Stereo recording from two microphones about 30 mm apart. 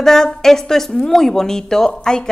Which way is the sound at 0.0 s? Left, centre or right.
Centre.